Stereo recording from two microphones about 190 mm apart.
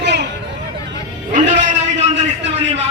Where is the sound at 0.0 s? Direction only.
65° right (ahead or behind).